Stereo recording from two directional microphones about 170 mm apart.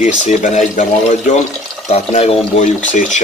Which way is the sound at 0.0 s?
45° left (ahead or behind).